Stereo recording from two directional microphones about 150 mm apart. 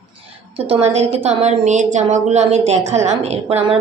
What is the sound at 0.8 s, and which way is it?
A woman's voice, 45° right (ahead or behind).